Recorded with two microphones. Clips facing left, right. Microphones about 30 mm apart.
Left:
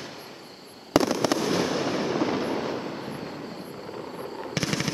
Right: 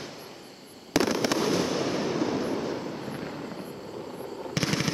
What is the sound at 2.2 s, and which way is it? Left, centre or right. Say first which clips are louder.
Fireworks: left 2 dB; left.